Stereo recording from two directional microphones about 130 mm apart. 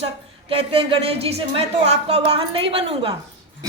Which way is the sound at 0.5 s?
45° right (ahead or behind).